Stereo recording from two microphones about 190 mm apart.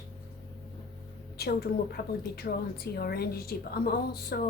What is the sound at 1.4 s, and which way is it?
A woman's voice, 55° left (ahead or behind).